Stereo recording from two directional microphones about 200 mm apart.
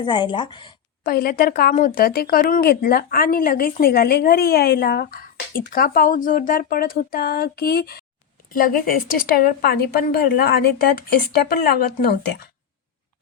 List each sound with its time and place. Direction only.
0.0 s a woman's voice: 25° left (ahead or behind)
1.0 s speech: 45° left (ahead or behind)